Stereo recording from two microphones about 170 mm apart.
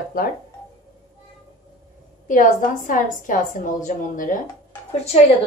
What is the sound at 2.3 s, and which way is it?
A woman's voice, 50° left (ahead or behind).